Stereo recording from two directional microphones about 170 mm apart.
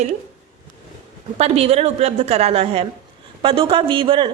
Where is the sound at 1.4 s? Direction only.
35° right (ahead or behind).